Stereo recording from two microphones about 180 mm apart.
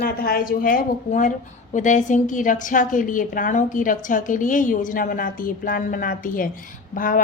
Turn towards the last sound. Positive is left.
turn(degrees=50)  # may be behind; listen again after turning